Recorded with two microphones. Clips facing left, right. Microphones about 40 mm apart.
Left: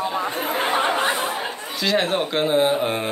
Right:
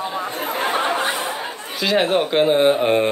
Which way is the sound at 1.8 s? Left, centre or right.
Centre.